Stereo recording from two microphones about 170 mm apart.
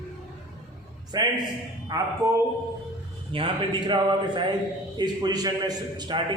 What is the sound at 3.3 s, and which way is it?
A man's voice, 30° right (ahead or behind).